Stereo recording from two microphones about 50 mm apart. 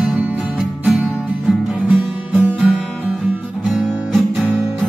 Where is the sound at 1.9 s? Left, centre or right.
Right.